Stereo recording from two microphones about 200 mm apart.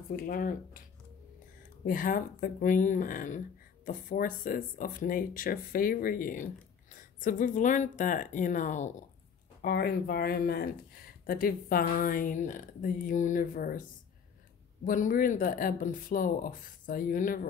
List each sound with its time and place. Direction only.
0.1 s speech: 45° left (ahead or behind)
1.9 s speech: 45° left (ahead or behind)
9.6 s speech: 50° left (ahead or behind)
14.9 s speech: 40° left (ahead or behind)